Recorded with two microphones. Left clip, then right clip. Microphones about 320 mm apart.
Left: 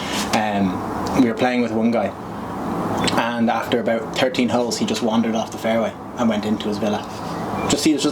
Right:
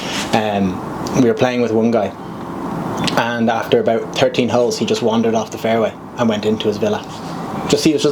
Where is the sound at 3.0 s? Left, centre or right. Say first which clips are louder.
Right 4 dB; right.